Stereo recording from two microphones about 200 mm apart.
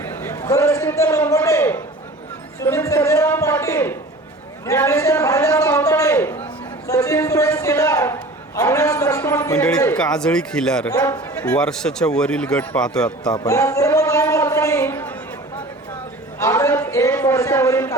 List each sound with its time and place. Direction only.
0.0 s a sound: 10° left (ahead or behind)
9.7 s speech: 10° left (ahead or behind)
10.8 s a man's voice: 15° left (ahead or behind)
11.4 s speech: 5° left (ahead or behind)
13.1 s a sound: 20° left (ahead or behind)
16.4 s a man's voice: 15° left (ahead or behind)